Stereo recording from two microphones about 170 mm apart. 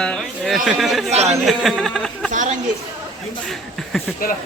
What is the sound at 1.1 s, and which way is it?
Speech, 40° right (ahead or behind).